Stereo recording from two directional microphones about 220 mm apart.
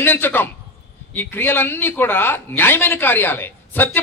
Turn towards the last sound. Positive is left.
turn(degrees=10)  # may be behind; listen again after turning